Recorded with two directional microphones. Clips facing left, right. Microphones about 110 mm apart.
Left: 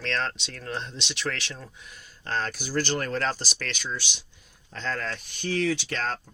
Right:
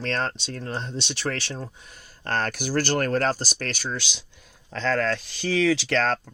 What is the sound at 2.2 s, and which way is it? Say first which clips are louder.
Speech: right 4 dB; 60° right (ahead or behind).